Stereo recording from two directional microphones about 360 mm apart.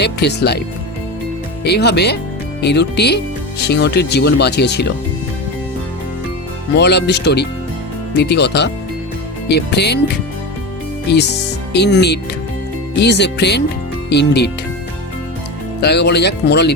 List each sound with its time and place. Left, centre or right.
0.0 s speech: left
1.6 s speech: left
6.7 s speech: left
11.1 s speech: left
15.8 s speech: left